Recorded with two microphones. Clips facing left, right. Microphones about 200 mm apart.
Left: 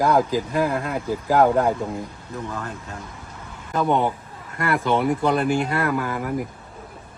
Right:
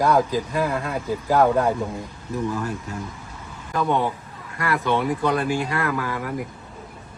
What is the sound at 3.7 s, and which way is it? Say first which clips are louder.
Speech: left 2 dB; 20° left (ahead or behind).